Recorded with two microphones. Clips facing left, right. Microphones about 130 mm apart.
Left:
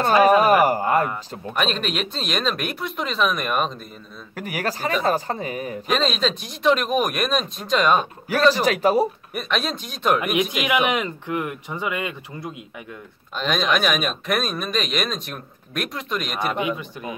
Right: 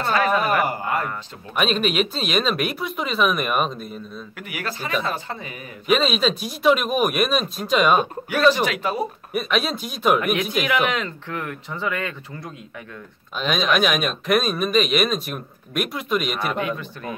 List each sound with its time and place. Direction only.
0.1 s speech: 15° left (ahead or behind)
0.7 s speech: 40° left (ahead or behind)
1.6 s speech: 5° right (ahead or behind)
4.4 s speech: 40° left (ahead or behind)
5.9 s speech: 5° right (ahead or behind)
8.6 s speech: 40° left (ahead or behind)
9.3 s speech: 5° right (ahead or behind)
10.7 s speech: 15° left (ahead or behind)
13.4 s speech: centre (ahead or behind)
16.5 s speech: 15° left (ahead or behind)